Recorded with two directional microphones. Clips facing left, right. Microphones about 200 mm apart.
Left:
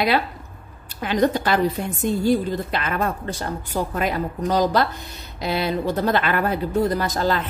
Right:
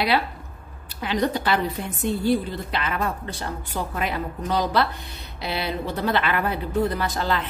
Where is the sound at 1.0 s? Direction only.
45° left (ahead or behind).